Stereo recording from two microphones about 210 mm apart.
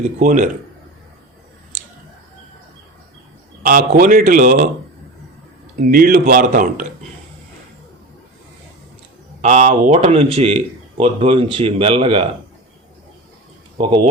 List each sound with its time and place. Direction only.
0.0 s speech: 35° right (ahead or behind)
3.6 s speech: 40° right (ahead or behind)
5.8 s speech: 40° right (ahead or behind)
9.4 s speech: 30° right (ahead or behind)
13.7 s speech: 25° right (ahead or behind)